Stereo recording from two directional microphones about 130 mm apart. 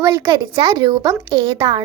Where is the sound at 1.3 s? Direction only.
40° right (ahead or behind).